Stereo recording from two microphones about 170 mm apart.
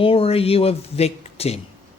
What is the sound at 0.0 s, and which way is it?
Speech, 35° left (ahead or behind).